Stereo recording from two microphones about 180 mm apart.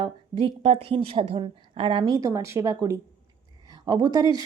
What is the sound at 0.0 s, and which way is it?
A woman's voice, 30° right (ahead or behind).